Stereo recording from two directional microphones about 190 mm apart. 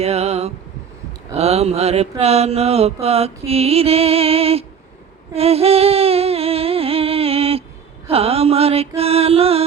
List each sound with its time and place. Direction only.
0.0 s mantra: 35° right (ahead or behind)
5.3 s a sound: 30° right (ahead or behind)
8.0 s mantra: 30° right (ahead or behind)